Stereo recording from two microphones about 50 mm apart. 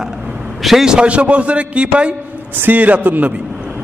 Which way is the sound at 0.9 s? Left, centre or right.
Right.